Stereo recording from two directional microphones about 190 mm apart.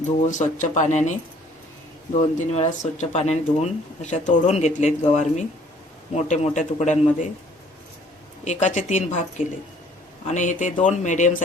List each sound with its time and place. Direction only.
0.3 s speech: 40° left (ahead or behind)
8.4 s speech: 40° left (ahead or behind)